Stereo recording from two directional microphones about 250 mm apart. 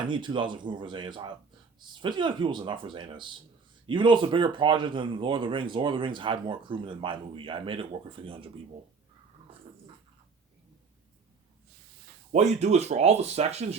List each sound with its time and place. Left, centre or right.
0.1 s speech: centre
12.3 s speech: right